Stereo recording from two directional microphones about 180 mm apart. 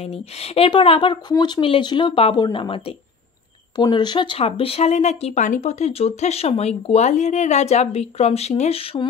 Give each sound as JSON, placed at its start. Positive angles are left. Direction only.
{"t": 0.0, "sound": "speech", "side_deg": 35}